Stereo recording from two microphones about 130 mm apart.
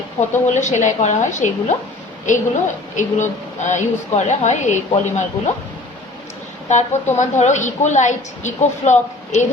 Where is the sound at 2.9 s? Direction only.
70° left (ahead or behind).